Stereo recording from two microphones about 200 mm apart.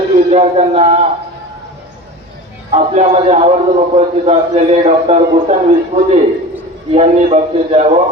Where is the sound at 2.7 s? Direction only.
30° right (ahead or behind).